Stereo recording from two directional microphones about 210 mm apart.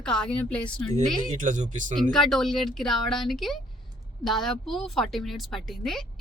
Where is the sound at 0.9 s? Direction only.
35° right (ahead or behind).